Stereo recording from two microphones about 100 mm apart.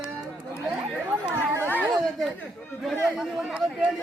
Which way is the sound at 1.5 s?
20° right (ahead or behind).